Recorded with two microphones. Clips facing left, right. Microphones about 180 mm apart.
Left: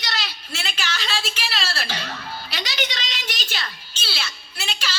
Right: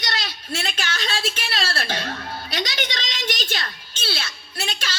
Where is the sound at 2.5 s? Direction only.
50° right (ahead or behind).